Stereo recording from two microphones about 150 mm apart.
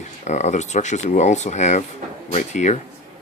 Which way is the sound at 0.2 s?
50° left (ahead or behind).